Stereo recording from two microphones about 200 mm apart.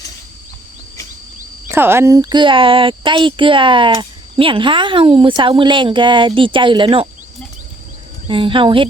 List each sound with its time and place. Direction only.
1.7 s a child's voice: 10° right (ahead or behind)
8.3 s a child's voice: 25° right (ahead or behind)